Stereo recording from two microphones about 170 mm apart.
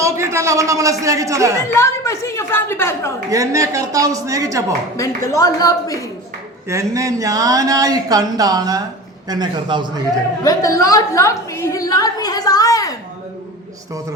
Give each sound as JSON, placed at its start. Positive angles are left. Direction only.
{"t": 0.0, "sound": "a man's voice", "side_deg": -15}
{"t": 1.7, "sound": "a woman's voice", "side_deg": 15}
{"t": 3.2, "sound": "speech", "side_deg": -20}
{"t": 4.9, "sound": "a woman's voice", "side_deg": 20}
{"t": 6.7, "sound": "speech", "side_deg": -20}
{"t": 10.4, "sound": "a sound", "side_deg": 20}